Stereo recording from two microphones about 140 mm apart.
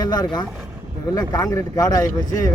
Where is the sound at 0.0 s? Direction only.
30° left (ahead or behind).